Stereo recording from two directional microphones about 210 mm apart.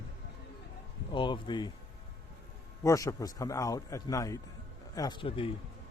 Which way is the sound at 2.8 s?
15° left (ahead or behind).